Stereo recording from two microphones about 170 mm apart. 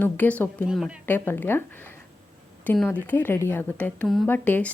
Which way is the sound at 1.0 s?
10° left (ahead or behind).